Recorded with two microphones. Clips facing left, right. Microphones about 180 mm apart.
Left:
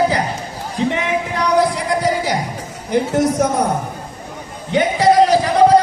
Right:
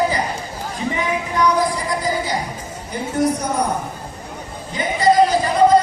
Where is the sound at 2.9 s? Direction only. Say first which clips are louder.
Left 4 dB; 75° left (ahead or behind).